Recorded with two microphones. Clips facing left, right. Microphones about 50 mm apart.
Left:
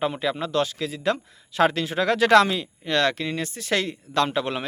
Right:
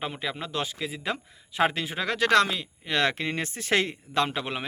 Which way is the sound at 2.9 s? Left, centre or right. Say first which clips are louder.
Left 3 dB; centre.